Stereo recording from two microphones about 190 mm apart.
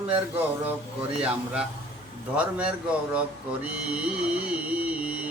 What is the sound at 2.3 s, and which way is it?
Speech, 5° right (ahead or behind).